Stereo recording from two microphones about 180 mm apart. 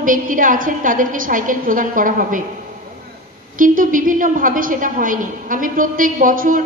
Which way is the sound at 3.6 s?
50° right (ahead or behind).